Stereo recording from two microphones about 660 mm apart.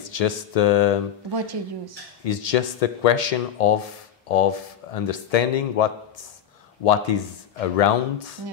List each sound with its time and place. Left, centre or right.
0.0 s a sound: left
1.3 s speech: right
2.2 s a man's voice: left